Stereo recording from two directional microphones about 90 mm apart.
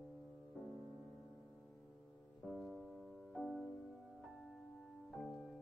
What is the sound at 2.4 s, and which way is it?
Music, centre (ahead or behind).